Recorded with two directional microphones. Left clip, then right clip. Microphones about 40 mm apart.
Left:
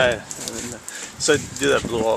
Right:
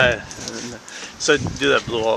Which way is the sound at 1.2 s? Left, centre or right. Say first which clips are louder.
Right 1 dB; left.